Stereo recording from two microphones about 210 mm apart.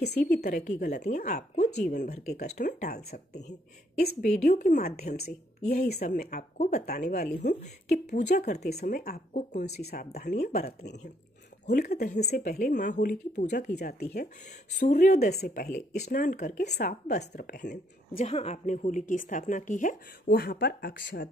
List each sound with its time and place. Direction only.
0.3 s a woman's voice: 45° left (ahead or behind)
2.8 s a woman's voice: 50° left (ahead or behind)
8.4 s a woman's voice: 35° left (ahead or behind)
8.6 s a woman's voice: 45° left (ahead or behind)
9.8 s a woman's voice: 50° left (ahead or behind)
10.6 s a woman's voice: 50° left (ahead or behind); by 15.1 s 35° left (ahead or behind)
15.1 s a woman's voice: 50° left (ahead or behind)
16.6 s a woman's voice: 50° left (ahead or behind)
17.3 s a woman's voice: 40° left (ahead or behind)